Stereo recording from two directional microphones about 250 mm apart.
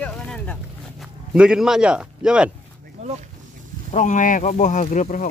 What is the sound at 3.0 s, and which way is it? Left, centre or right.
Speech, right.